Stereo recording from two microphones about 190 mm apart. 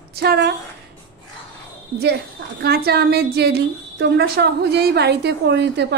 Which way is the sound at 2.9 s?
55° right (ahead or behind).